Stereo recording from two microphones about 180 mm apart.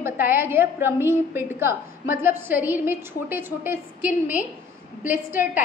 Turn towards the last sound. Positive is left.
turn(degrees=45)  # may be behind; listen again after turning